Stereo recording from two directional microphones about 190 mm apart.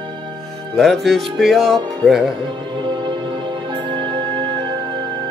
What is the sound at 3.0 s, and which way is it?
Music, 25° right (ahead or behind).